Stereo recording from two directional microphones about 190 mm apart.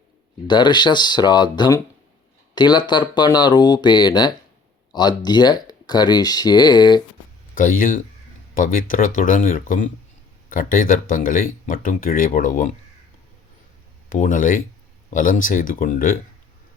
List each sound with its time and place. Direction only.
0.4 s speech: 25° left (ahead or behind)
7.5 s speech: 45° left (ahead or behind)
14.1 s speech: 45° left (ahead or behind)